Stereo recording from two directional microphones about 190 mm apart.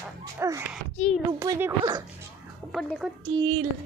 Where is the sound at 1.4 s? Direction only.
15° right (ahead or behind).